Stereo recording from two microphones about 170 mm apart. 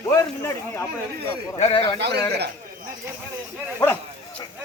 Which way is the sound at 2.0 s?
80° right.